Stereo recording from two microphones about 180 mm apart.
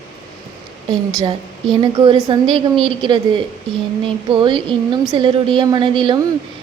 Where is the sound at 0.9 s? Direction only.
25° right (ahead or behind).